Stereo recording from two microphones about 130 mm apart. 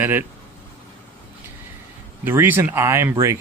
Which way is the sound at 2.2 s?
15° right (ahead or behind).